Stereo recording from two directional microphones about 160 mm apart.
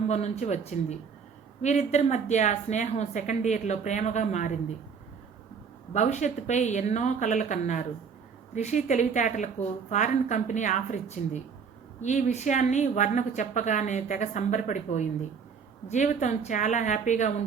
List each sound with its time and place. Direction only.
0.1 s a woman's voice: 45° left (ahead or behind)
5.9 s a woman's voice: 45° left (ahead or behind)